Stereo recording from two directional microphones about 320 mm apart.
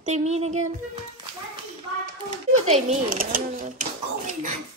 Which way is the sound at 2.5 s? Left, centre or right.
Right.